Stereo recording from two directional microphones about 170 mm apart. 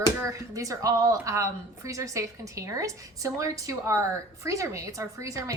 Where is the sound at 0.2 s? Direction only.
20° right (ahead or behind).